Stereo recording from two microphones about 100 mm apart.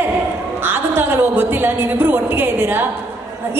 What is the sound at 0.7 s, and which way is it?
A woman's voice, 20° right (ahead or behind).